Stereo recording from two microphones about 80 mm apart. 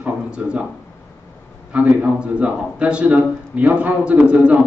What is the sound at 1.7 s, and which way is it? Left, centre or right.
A man's voice, centre.